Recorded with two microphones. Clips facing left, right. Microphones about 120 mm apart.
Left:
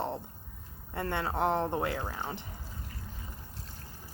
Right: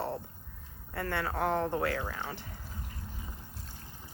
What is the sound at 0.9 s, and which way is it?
Speech, 25° left (ahead or behind).